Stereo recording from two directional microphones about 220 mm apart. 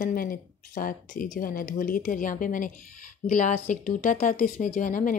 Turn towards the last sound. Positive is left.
turn(degrees=35)  # may be behind; listen again after turning